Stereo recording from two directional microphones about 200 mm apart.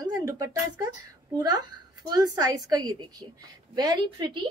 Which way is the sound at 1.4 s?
20° right (ahead or behind).